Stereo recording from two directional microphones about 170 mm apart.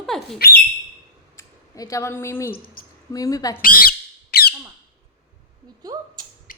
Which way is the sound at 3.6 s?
55° left (ahead or behind).